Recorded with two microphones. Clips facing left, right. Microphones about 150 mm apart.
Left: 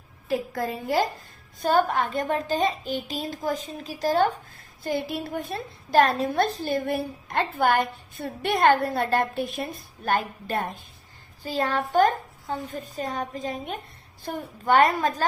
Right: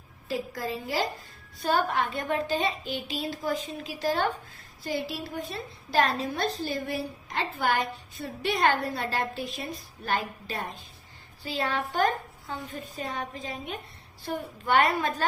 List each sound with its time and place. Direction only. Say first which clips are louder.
0.3 s a child's voice: left 4 dB; 55° left (ahead or behind)